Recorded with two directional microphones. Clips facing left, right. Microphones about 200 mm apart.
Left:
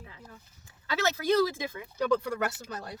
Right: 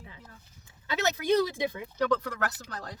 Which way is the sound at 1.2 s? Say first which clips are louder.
Even; 15° right (ahead or behind).